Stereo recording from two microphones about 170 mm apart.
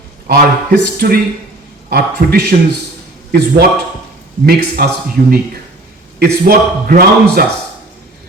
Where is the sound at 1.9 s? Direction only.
60° right (ahead or behind).